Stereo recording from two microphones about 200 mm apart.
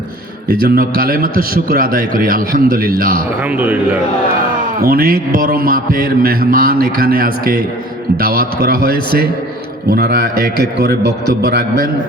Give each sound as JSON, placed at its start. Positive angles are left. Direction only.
{"t": 0.4, "sound": "a man's voice", "side_deg": -50}
{"t": 3.6, "sound": "a man's voice", "side_deg": -10}
{"t": 4.8, "sound": "a man's voice", "side_deg": -45}